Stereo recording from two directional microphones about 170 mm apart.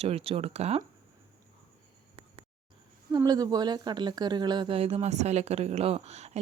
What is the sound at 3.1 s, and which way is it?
Speech, 20° right (ahead or behind).